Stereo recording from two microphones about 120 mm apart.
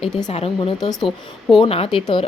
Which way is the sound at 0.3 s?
55° left (ahead or behind).